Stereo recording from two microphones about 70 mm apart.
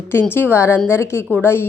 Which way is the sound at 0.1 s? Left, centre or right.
Left.